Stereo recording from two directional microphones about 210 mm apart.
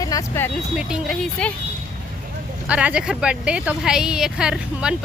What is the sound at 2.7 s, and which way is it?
A woman's voice, 5° right (ahead or behind).